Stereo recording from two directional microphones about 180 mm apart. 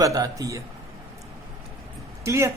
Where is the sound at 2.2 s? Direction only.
15° right (ahead or behind).